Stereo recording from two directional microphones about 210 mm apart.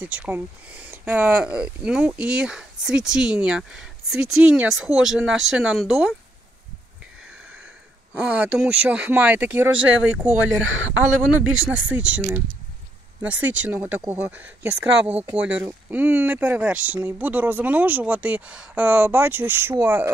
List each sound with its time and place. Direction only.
0.0 s speech: 5° right (ahead or behind)
8.1 s speech: 5° right (ahead or behind)